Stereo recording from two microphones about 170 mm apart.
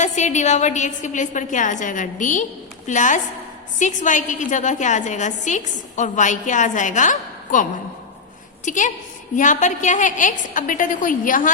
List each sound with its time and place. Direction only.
0.0 s a woman's voice: 45° left (ahead or behind)